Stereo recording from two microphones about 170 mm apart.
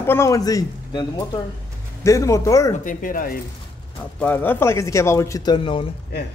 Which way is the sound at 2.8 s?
55° left (ahead or behind).